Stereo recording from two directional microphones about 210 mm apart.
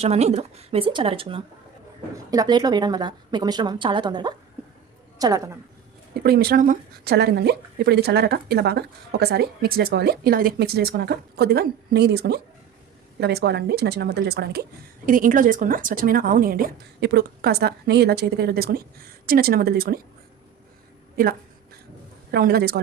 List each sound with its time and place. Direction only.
0.0 s a woman's voice: 30° right (ahead or behind)
6.2 s speech: 50° right (ahead or behind)
22.3 s speech: 50° right (ahead or behind)